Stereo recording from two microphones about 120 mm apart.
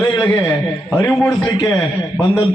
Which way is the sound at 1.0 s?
25° left (ahead or behind).